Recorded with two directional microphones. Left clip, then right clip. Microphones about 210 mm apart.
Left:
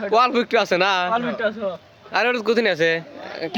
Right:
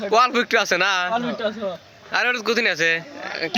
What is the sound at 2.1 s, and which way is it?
Speech, 10° left (ahead or behind).